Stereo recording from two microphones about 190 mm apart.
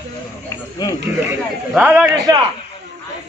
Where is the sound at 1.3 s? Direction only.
5° right (ahead or behind).